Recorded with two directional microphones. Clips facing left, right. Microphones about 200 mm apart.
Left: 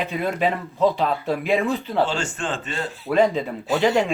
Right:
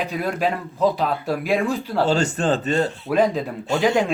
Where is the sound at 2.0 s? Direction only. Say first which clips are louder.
Right 7 dB; 40° right (ahead or behind).